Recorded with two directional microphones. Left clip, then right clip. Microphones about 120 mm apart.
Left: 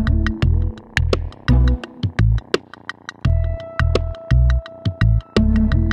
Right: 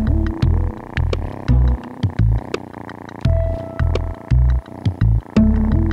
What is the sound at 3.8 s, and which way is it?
Music, centre (ahead or behind).